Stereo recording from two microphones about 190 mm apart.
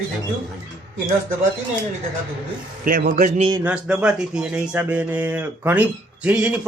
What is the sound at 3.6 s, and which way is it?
Speech, 5° right (ahead or behind).